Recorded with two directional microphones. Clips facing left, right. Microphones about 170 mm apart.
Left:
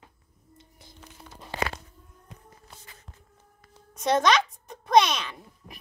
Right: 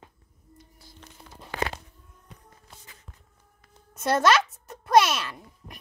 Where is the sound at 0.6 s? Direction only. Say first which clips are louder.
Even; 20° left (ahead or behind).